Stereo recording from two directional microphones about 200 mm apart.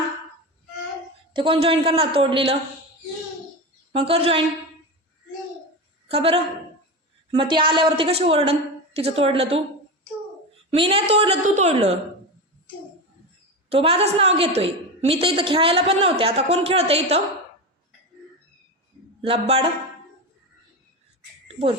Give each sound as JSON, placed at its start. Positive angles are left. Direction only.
{"t": 1.3, "sound": "a woman's voice", "side_deg": -25}
{"t": 3.9, "sound": "a woman's voice", "side_deg": -30}
{"t": 6.1, "sound": "a woman's voice", "side_deg": -30}
{"t": 10.7, "sound": "a woman's voice", "side_deg": -30}
{"t": 13.7, "sound": "a woman's voice", "side_deg": -30}
{"t": 19.2, "sound": "a woman's voice", "side_deg": -30}
{"t": 21.4, "sound": "a sound", "side_deg": -30}